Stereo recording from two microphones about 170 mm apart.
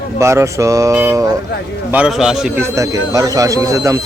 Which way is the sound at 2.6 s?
20° right (ahead or behind).